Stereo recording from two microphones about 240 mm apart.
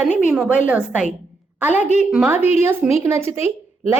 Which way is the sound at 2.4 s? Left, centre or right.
Left.